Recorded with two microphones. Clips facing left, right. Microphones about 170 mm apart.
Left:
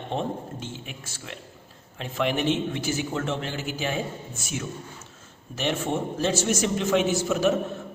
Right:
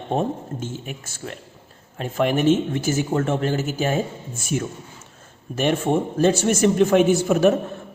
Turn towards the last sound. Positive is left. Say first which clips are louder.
# right 6 dB
turn(degrees=-55)  # may be behind; listen again after turning